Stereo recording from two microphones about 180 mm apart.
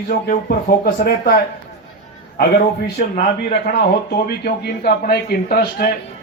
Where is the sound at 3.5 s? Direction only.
65° left (ahead or behind).